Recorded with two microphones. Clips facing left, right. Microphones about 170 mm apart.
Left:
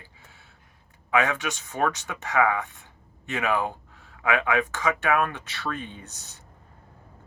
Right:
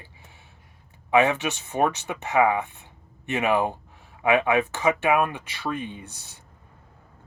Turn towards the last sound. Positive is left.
turn(degrees=-15)  # may be behind; listen again after turning